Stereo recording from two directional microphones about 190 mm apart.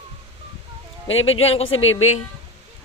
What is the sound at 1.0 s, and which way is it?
Speech, 90° left.